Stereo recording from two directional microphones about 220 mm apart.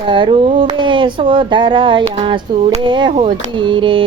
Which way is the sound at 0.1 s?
20° right (ahead or behind).